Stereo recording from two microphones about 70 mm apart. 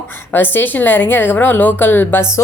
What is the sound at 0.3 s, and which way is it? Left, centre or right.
A woman's voice, left.